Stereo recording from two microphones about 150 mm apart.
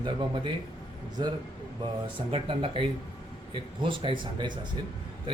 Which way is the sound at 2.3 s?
40° right (ahead or behind).